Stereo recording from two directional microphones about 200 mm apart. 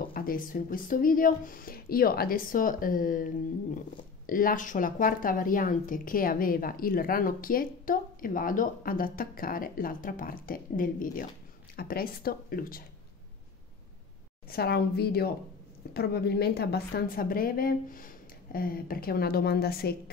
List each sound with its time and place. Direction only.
0.0 s speech: 45° left (ahead or behind)
14.5 s speech: 55° left (ahead or behind)